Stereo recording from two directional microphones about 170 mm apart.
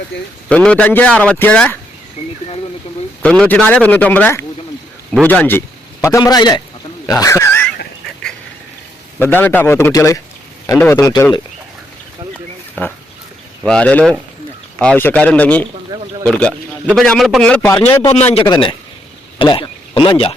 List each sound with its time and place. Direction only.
0.4 s a man's voice: 5° left (ahead or behind)
3.2 s a man's voice: 5° left (ahead or behind)
9.1 s a man's voice: 10° left (ahead or behind)
12.3 s a sound: 5° left (ahead or behind)
13.6 s a man's voice: 5° left (ahead or behind)
18.4 s speech: 25° left (ahead or behind)